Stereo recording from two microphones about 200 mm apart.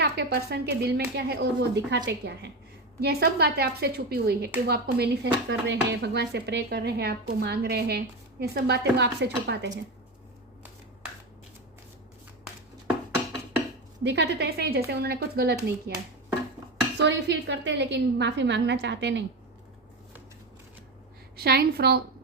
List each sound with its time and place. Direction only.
0.0 s speech: 55° right (ahead or behind)
14.0 s speech: 60° right (ahead or behind)
17.0 s speech: 60° right (ahead or behind)
21.3 s speech: 50° right (ahead or behind)